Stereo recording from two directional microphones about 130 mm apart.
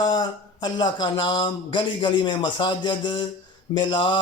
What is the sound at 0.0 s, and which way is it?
Speech, 35° left (ahead or behind).